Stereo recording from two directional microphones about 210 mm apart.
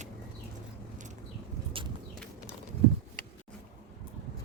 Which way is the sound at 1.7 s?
25° right (ahead or behind).